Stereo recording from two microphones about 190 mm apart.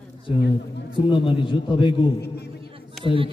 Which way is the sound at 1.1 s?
25° left (ahead or behind).